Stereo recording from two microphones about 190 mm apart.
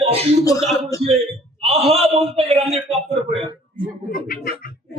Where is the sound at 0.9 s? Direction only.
20° left (ahead or behind).